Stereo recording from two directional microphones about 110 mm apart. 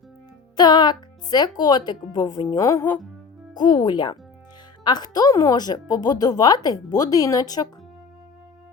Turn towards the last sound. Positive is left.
turn(degrees=35)  # may be behind; listen again after turning